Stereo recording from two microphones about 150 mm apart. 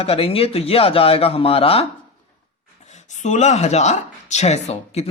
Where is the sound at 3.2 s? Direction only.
50° left (ahead or behind).